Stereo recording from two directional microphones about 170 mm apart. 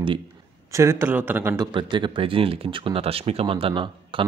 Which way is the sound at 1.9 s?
30° right (ahead or behind).